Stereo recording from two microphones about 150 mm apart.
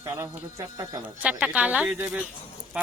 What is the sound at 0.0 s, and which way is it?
Speech, 20° right (ahead or behind).